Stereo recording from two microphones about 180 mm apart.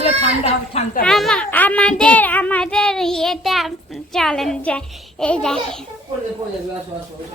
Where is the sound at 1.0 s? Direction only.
5° left (ahead or behind).